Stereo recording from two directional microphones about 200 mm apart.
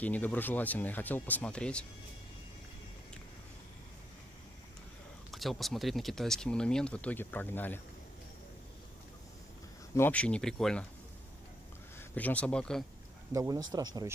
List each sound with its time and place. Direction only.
0.0 s speech: 10° left (ahead or behind)
5.3 s speech: centre (ahead or behind)
9.9 s speech: 10° left (ahead or behind)
12.0 s speech: 10° left (ahead or behind)
13.3 s speech: 15° right (ahead or behind)